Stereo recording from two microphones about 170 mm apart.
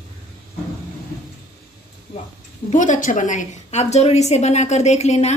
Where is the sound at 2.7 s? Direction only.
45° left (ahead or behind).